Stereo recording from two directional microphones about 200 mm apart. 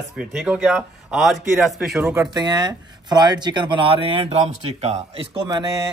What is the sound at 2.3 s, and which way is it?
Speech, 20° right (ahead or behind).